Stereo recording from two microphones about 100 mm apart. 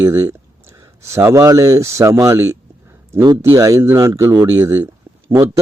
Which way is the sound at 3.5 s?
30° right (ahead or behind).